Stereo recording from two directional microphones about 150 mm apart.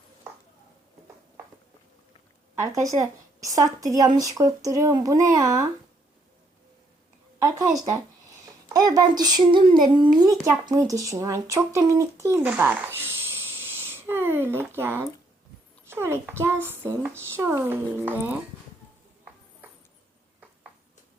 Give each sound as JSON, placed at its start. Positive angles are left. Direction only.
{"t": 2.7, "sound": "speech", "side_deg": -20}
{"t": 8.7, "sound": "a child's voice", "side_deg": -25}